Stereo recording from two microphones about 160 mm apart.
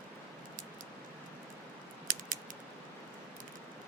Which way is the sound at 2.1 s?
55° right (ahead or behind).